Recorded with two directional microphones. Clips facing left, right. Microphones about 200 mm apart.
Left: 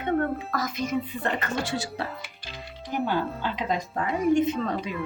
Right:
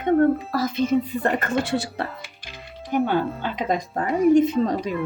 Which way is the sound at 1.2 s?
50° right (ahead or behind).